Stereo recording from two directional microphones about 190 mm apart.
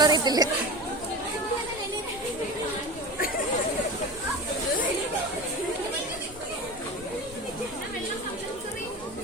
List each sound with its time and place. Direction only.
0.0 s speech: 20° right (ahead or behind)